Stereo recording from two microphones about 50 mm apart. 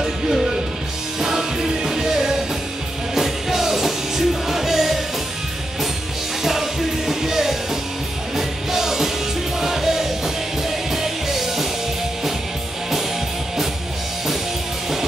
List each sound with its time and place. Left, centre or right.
0.0 s music: centre
6.4 s music: centre